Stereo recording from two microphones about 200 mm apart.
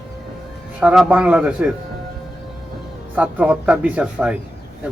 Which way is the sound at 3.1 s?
10° right (ahead or behind).